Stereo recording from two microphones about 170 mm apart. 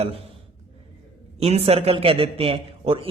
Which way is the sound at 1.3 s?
40° right (ahead or behind).